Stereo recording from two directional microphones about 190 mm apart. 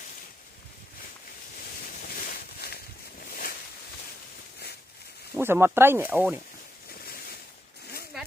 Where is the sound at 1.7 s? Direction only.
50° left (ahead or behind).